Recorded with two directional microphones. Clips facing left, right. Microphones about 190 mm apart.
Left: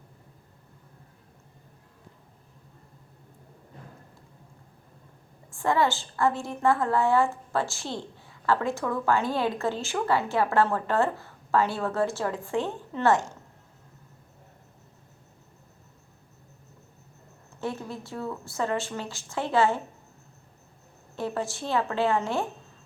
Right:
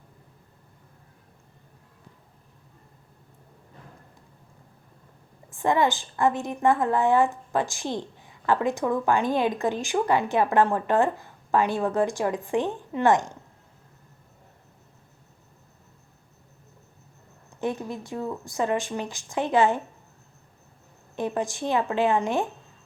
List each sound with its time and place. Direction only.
5.5 s a woman's voice: 20° right (ahead or behind)
17.6 s a woman's voice: 15° right (ahead or behind)
21.2 s a woman's voice: 15° right (ahead or behind)